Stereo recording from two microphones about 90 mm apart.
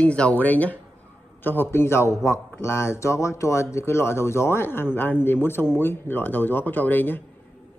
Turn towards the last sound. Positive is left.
turn(degrees=20)  # may be behind; listen again after turning